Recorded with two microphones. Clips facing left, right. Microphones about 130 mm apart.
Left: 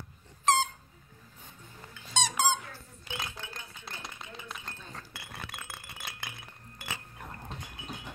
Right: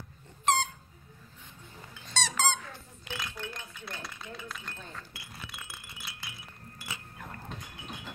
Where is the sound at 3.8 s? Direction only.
20° left (ahead or behind).